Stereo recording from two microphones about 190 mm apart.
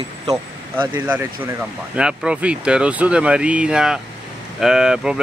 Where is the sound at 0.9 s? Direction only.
10° right (ahead or behind).